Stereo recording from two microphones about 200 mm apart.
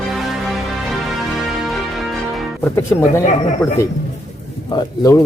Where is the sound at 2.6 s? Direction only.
15° left (ahead or behind).